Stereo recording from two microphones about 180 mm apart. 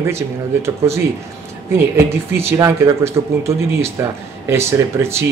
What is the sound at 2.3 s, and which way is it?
A man's voice, 15° right (ahead or behind).